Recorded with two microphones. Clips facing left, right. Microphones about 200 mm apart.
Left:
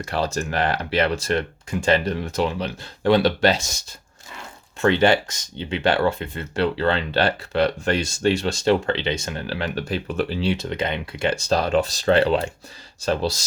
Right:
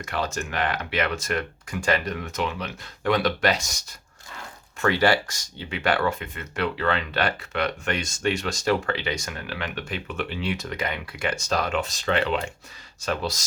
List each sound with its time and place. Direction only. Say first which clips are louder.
0.0 s speech: left 4 dB; 35° left (ahead or behind)